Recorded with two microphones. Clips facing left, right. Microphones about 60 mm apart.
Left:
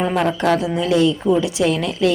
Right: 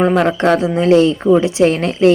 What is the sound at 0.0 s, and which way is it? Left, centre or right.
A woman's voice, right.